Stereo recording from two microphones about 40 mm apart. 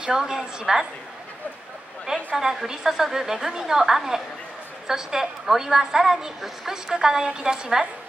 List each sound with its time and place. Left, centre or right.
0.0 s a woman's voice: centre
2.3 s a woman's voice: centre